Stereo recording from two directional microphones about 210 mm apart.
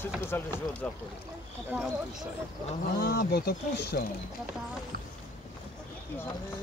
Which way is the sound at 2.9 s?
50° left (ahead or behind).